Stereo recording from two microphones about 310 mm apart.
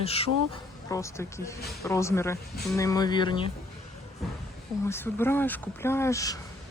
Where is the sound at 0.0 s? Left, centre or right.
Centre.